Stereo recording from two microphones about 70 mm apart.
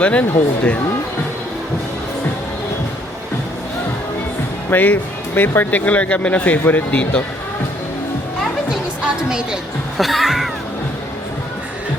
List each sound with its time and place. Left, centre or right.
0.0 s speech: centre
4.7 s speech: left
10.0 s music: centre